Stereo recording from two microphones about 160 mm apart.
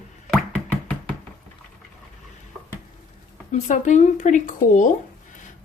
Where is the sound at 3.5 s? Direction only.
50° left (ahead or behind).